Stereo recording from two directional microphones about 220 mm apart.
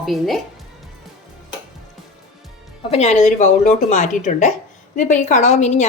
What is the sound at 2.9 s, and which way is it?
A woman's voice, 30° left (ahead or behind).